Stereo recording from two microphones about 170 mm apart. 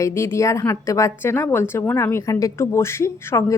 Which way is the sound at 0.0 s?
15° left (ahead or behind).